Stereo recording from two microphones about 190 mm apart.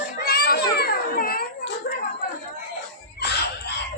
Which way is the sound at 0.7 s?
55° left (ahead or behind).